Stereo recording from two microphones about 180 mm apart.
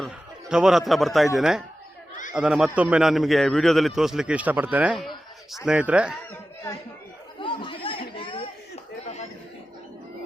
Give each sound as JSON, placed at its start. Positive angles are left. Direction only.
{"t": 0.0, "sound": "a man's voice", "side_deg": -5}
{"t": 7.3, "sound": "chatter", "side_deg": 30}